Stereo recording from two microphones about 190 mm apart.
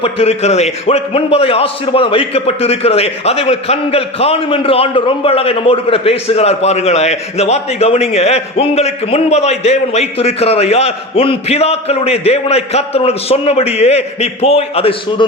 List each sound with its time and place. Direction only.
0.0 s a man's voice: 35° left (ahead or behind)